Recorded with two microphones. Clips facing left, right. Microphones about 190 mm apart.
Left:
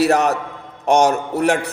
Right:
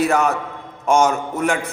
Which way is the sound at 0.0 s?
70° left (ahead or behind).